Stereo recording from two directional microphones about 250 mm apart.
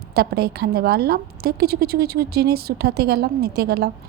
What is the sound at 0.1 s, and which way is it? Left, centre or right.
A woman's voice, right.